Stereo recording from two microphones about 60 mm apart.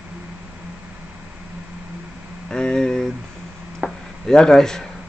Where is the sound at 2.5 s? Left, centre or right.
Centre.